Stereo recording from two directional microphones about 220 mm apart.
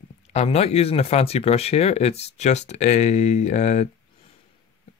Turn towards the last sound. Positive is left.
turn(degrees=30)  # may be behind; listen again after turning